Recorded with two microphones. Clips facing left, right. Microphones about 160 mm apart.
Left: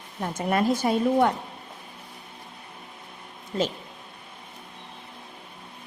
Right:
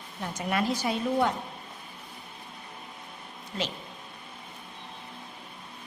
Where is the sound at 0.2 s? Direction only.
50° left (ahead or behind).